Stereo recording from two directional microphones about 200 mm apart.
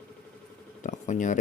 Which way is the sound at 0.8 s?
40° left (ahead or behind).